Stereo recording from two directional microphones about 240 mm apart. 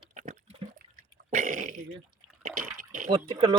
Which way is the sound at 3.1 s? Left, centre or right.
Centre.